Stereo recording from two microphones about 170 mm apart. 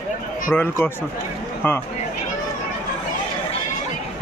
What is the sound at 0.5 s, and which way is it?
Speech, 10° left (ahead or behind).